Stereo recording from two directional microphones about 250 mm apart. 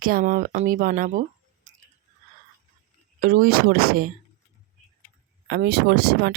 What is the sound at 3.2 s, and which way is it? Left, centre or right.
Speech, right.